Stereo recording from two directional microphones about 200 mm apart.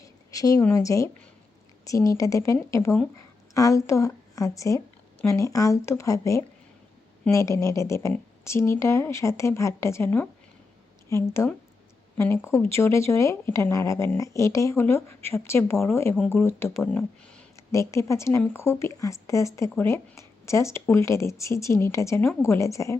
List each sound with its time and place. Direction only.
0.0 s a woman's voice: 15° left (ahead or behind)